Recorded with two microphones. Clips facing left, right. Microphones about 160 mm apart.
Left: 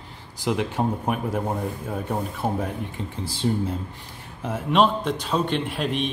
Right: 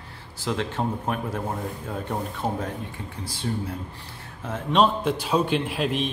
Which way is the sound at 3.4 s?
25° left (ahead or behind).